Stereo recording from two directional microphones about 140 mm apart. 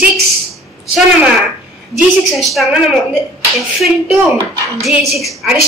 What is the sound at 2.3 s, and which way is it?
Speech, centre (ahead or behind).